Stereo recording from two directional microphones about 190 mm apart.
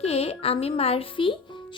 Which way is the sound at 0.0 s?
30° left (ahead or behind).